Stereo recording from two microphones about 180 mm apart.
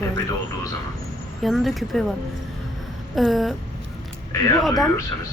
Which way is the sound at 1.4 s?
Centre (ahead or behind).